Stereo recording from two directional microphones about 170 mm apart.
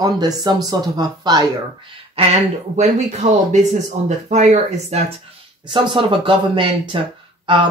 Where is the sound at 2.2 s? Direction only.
35° right (ahead or behind).